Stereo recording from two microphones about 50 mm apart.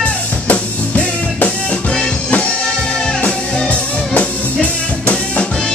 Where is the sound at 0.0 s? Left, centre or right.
Left.